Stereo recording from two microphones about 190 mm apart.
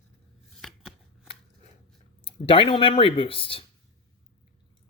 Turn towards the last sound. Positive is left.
turn(degrees=30)  # may be behind; listen again after turning